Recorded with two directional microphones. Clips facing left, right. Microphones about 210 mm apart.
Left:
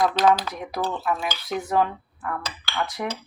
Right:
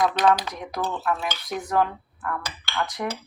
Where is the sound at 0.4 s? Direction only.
5° left (ahead or behind).